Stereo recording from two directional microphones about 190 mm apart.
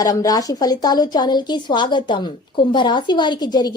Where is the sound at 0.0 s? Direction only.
20° left (ahead or behind).